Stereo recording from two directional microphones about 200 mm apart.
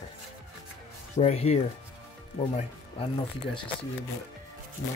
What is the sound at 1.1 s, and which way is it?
Speech, 35° left (ahead or behind).